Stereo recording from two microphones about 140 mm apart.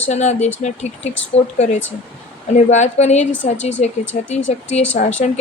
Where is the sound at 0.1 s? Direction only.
55° left (ahead or behind).